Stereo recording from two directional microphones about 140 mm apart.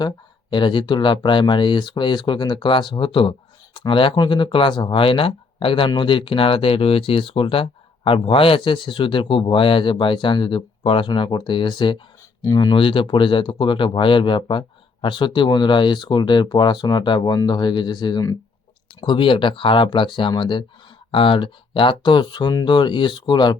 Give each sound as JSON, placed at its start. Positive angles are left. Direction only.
{"t": 0.5, "sound": "speech", "side_deg": 35}